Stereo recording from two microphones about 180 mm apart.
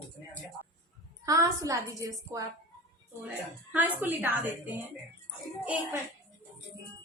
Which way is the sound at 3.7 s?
10° right (ahead or behind).